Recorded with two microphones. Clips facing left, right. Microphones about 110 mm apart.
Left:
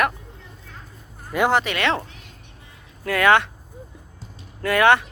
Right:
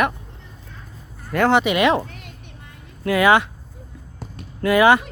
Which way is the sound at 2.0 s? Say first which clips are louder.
Right 5 dB; 55° right (ahead or behind).